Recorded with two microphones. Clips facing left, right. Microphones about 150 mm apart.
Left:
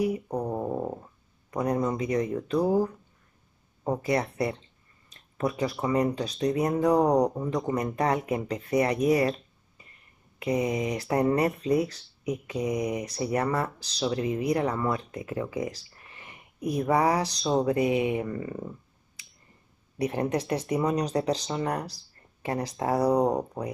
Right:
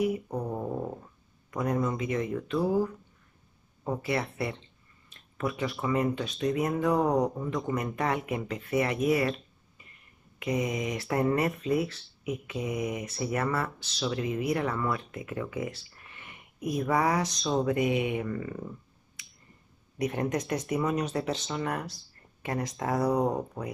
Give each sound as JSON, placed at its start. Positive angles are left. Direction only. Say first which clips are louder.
{"t": 0.3, "sound": "a sound", "louder": "left 3 dB", "side_deg": 15}
{"t": 1.5, "sound": "speech", "louder": "left 2 dB", "side_deg": 35}
{"t": 4.0, "sound": "speech", "louder": "left 4 dB", "side_deg": 40}
{"t": 10.4, "sound": "speech", "louder": "left 3 dB", "side_deg": 35}
{"t": 19.2, "sound": "a sound", "louder": "right 1 dB", "side_deg": 35}
{"t": 20.0, "sound": "speech", "louder": "left 2 dB", "side_deg": 35}